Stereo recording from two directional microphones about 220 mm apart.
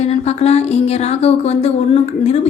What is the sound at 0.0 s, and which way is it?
A woman's voice, 30° left (ahead or behind).